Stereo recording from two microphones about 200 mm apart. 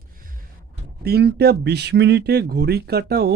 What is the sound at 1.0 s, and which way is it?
Speech, 55° right (ahead or behind).